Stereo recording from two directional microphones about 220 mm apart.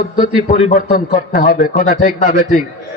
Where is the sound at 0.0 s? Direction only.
35° left (ahead or behind).